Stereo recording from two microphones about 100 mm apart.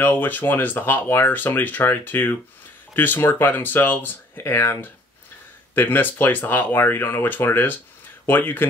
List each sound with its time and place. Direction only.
0.0 s speech: 20° left (ahead or behind)